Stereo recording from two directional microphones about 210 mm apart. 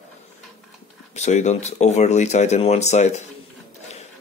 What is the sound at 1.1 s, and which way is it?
Speech, 35° left (ahead or behind).